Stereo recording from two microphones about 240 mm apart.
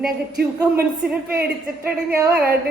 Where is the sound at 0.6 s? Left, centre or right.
Centre.